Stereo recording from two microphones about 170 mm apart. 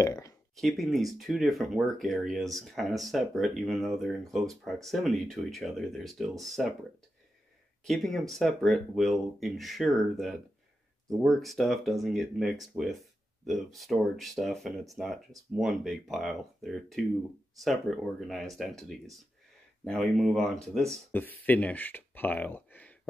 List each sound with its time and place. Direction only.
0.0 s speech: 20° left (ahead or behind)
0.6 s speech: centre (ahead or behind)
7.8 s speech: centre (ahead or behind)